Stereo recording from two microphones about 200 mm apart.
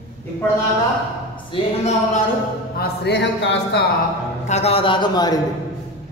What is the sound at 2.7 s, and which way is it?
Speech, 60° left (ahead or behind).